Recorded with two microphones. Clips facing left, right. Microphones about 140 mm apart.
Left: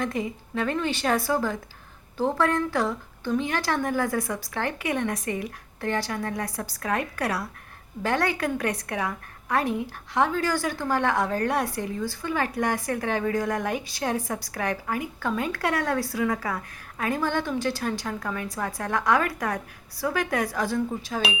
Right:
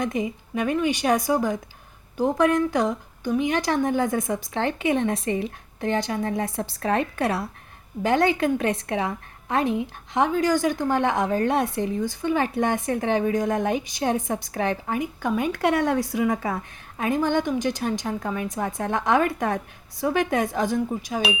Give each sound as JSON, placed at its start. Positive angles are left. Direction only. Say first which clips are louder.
{"t": 0.0, "sound": "a woman's voice", "louder": "right 3 dB", "side_deg": -20}